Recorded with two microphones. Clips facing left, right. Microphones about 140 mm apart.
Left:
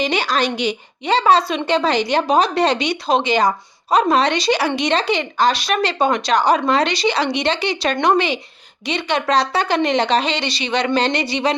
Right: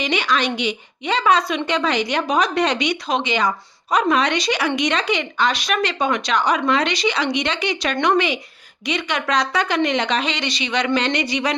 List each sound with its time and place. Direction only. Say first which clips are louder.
0.0 s a woman's voice: left 2 dB; 35° left (ahead or behind)